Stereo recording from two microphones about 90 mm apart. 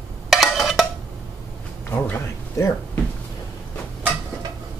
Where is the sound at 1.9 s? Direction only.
25° left (ahead or behind).